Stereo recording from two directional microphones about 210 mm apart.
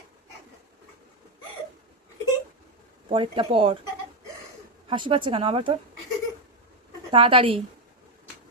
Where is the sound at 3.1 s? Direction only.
25° right (ahead or behind).